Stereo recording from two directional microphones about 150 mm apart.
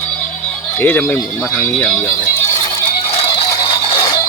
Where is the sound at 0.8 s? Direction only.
10° left (ahead or behind).